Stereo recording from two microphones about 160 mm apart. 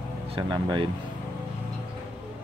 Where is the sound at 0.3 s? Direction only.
30° right (ahead or behind).